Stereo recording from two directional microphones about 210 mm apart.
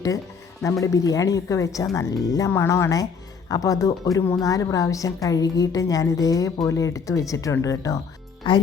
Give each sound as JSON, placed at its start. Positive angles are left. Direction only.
{"t": 0.6, "sound": "a woman's voice", "side_deg": 15}